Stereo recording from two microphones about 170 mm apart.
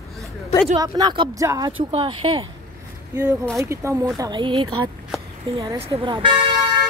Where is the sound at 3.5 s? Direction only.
15° right (ahead or behind).